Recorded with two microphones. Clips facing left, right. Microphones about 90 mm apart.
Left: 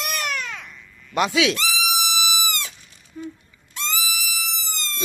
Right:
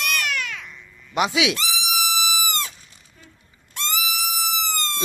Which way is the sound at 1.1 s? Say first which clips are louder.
Left 1 dB; 15° right (ahead or behind).